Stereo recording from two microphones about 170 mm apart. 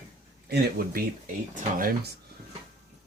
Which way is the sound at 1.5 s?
50° right (ahead or behind).